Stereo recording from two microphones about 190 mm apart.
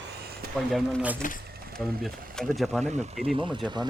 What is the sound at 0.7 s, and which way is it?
Speech, 5° right (ahead or behind).